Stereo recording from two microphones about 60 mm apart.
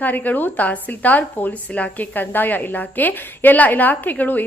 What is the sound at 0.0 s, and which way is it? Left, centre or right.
A woman's voice, left.